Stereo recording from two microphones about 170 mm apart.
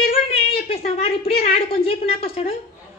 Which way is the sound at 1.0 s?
35° left (ahead or behind).